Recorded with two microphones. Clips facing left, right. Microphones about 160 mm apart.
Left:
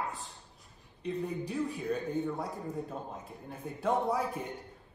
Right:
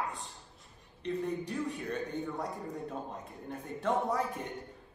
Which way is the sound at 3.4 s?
10° left (ahead or behind).